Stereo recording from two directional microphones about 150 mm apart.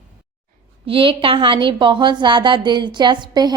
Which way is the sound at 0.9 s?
35° right (ahead or behind).